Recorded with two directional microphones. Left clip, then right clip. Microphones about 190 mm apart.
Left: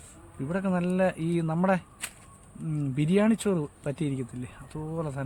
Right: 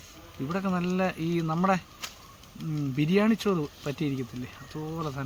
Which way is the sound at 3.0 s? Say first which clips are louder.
Even; 40° left (ahead or behind).